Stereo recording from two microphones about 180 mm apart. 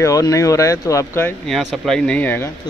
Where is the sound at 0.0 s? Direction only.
15° left (ahead or behind).